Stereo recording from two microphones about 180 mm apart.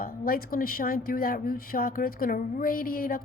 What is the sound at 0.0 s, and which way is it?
Speech, 55° left (ahead or behind).